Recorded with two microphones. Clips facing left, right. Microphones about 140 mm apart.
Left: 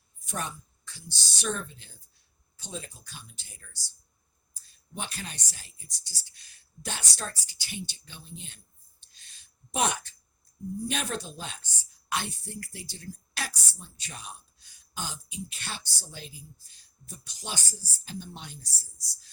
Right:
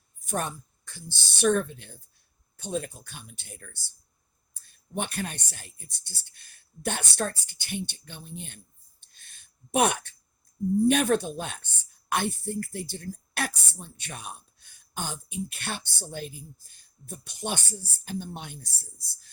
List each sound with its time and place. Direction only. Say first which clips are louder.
0.3 s a woman's voice: right 5 dB; 50° right (ahead or behind)